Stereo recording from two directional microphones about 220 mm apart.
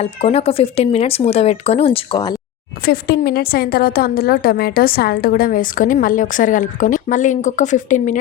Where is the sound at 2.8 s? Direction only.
45° left (ahead or behind).